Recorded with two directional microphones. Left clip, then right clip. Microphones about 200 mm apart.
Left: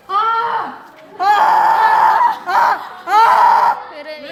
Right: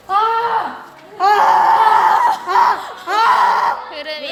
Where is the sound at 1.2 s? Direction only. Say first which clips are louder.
Even; 50° left (ahead or behind).